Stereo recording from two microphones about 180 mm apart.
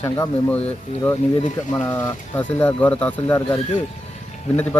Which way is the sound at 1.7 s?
10° left (ahead or behind).